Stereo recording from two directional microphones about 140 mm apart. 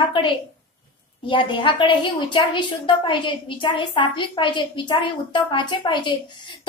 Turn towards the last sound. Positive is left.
turn(degrees=35)  # may be behind; listen again after turning